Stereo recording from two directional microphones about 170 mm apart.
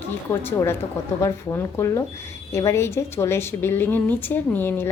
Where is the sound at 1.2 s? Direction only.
15° left (ahead or behind).